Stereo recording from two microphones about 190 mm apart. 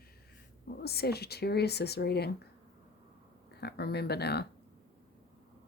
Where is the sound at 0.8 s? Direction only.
55° left (ahead or behind).